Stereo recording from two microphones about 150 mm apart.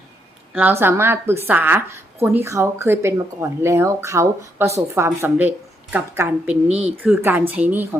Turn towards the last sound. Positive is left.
turn(degrees=-10)  # may be behind; listen again after turning